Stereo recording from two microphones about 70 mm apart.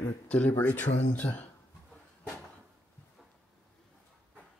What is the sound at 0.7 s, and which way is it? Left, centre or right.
Speech, left.